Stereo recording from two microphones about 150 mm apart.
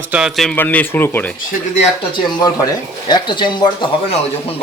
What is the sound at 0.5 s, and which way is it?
Speech, 10° left (ahead or behind).